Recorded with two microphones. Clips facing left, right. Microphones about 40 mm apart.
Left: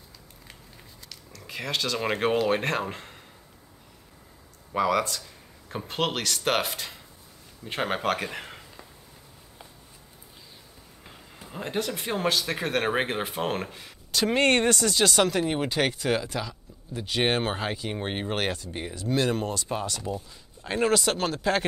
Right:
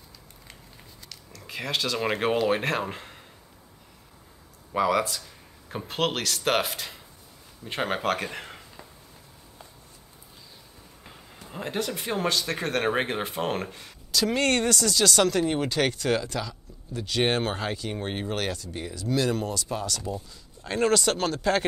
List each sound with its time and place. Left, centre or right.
1.0 s speech: centre
4.7 s a man's voice: centre
11.4 s speech: centre
14.1 s speech: left
15.1 s speech: centre
20.0 s speech: centre